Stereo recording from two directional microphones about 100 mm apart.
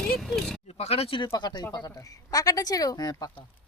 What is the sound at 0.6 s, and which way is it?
Speech, 90° left.